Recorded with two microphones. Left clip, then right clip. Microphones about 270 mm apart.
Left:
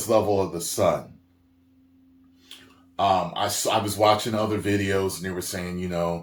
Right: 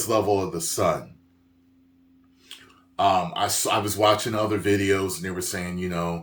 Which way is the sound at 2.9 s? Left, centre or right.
Centre.